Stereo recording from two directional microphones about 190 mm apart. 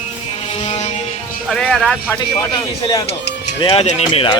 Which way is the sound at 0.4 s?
30° left (ahead or behind).